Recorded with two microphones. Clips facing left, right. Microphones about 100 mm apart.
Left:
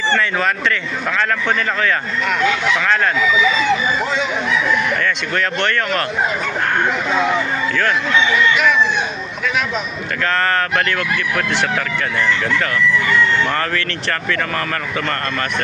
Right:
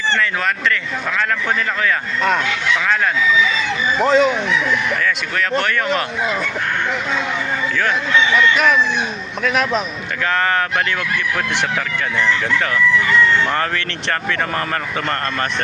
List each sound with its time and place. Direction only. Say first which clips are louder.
4.0 s speech: right 7 dB; 45° right (ahead or behind)
5.6 s speech: right 1 dB; 10° right (ahead or behind)